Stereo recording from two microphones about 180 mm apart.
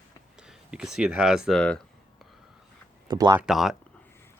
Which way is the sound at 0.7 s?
5° right (ahead or behind).